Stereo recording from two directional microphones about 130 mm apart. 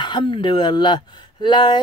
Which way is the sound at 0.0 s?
35° left (ahead or behind).